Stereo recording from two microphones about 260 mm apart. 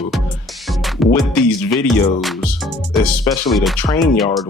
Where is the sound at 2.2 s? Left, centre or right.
Centre.